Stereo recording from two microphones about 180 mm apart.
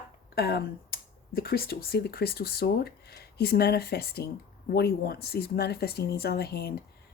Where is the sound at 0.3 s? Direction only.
60° left (ahead or behind).